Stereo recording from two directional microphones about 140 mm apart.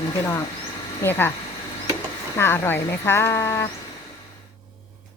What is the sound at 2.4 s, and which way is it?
Speech, 15° left (ahead or behind).